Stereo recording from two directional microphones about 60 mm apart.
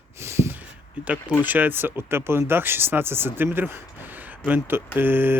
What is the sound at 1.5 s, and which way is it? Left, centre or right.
Speech, right.